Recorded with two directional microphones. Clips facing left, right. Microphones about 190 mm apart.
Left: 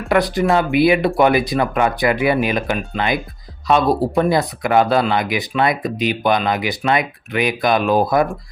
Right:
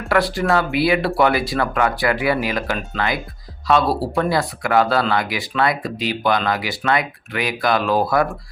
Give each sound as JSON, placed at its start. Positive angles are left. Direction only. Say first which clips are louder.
{"t": 0.1, "sound": "speech", "louder": "left 2 dB", "side_deg": 20}